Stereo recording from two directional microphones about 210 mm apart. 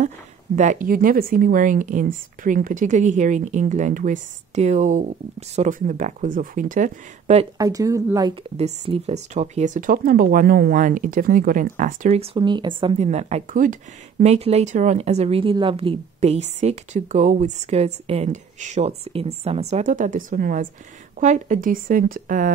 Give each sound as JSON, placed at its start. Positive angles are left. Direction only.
{"t": 0.6, "sound": "a woman's voice", "side_deg": -35}
{"t": 7.5, "sound": "speech", "side_deg": -15}
{"t": 8.5, "sound": "a woman's voice", "side_deg": -30}